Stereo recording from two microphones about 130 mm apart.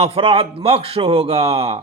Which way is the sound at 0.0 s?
50° right (ahead or behind).